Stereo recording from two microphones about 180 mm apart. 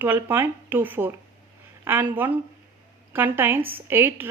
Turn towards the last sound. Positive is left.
turn(degrees=-10)  # may be behind; listen again after turning